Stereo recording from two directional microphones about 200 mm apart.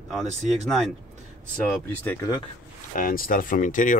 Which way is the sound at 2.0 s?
15° left (ahead or behind).